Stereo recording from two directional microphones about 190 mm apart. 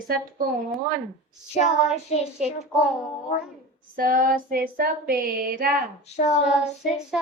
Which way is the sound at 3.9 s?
50° right (ahead or behind).